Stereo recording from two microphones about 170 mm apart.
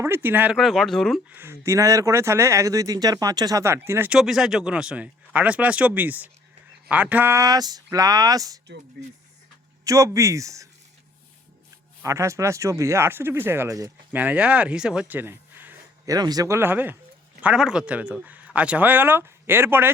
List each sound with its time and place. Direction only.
0.0 s speech: 15° right (ahead or behind)
0.5 s speech: centre (ahead or behind)
1.3 s speech: 15° right (ahead or behind)
9.8 s speech: 20° right (ahead or behind)
12.0 s speech: 15° right (ahead or behind)